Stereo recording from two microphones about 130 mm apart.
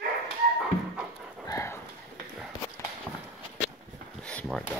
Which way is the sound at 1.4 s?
25° left (ahead or behind).